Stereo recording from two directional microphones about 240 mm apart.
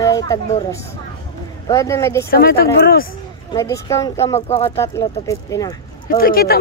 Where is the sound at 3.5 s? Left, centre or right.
Centre.